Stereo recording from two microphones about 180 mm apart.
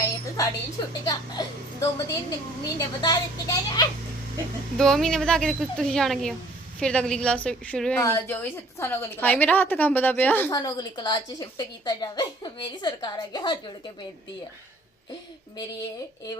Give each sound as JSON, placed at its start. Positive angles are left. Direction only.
{"t": 0.0, "sound": "a woman's voice", "side_deg": 20}
{"t": 4.8, "sound": "a woman's voice", "side_deg": 5}
{"t": 10.5, "sound": "a woman's voice", "side_deg": 20}